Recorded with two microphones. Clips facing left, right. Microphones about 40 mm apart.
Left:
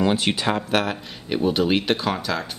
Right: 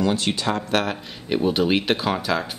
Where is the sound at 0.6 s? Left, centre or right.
Centre.